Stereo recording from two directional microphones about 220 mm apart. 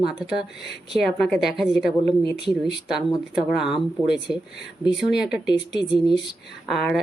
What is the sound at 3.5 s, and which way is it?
Speech, centre (ahead or behind).